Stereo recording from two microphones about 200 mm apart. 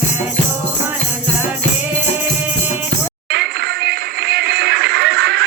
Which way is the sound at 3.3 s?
55° right (ahead or behind).